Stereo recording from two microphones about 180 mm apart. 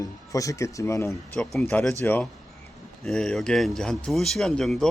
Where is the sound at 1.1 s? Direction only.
Centre (ahead or behind).